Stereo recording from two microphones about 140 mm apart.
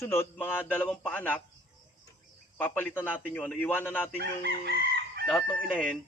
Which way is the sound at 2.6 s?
15° left (ahead or behind).